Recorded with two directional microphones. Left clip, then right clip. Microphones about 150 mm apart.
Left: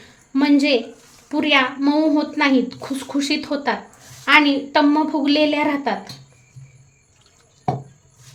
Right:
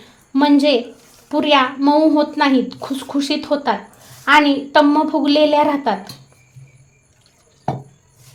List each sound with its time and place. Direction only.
0.3 s a woman's voice: 20° right (ahead or behind)